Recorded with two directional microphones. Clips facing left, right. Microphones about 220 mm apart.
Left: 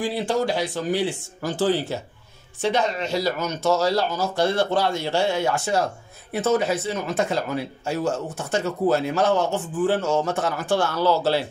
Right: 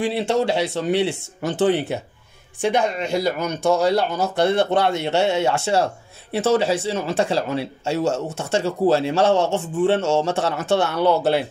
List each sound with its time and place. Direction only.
0.0 s speech: 25° right (ahead or behind)
3.1 s speech: 55° right (ahead or behind)
4.9 s speech: 25° right (ahead or behind)
10.9 s speech: 60° right (ahead or behind)